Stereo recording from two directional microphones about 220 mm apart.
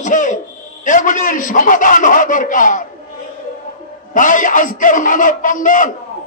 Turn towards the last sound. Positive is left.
turn(degrees=35)  # may be behind; listen again after turning